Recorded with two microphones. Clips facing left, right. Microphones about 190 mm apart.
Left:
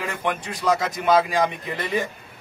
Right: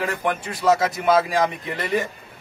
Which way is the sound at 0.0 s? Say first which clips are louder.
Right 2 dB; centre (ahead or behind).